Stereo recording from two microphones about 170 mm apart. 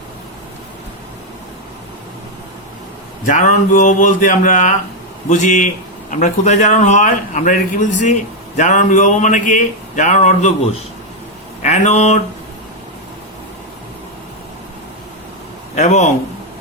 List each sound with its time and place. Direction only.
3.2 s speech: 50° left (ahead or behind)
15.7 s a man's voice: 45° left (ahead or behind)